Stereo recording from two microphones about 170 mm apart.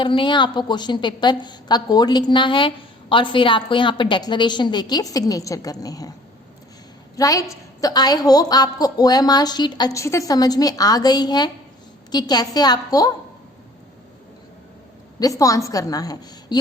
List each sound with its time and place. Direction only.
0.0 s a woman's voice: 30° left (ahead or behind)
7.2 s a woman's voice: 20° left (ahead or behind)
15.2 s a woman's voice: 20° left (ahead or behind)